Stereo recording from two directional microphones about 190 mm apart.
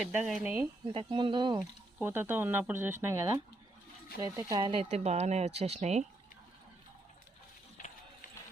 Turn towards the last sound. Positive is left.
turn(degrees=45)  # may be behind; listen again after turning